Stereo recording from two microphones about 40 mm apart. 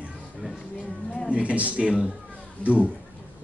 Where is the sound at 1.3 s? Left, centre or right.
Right.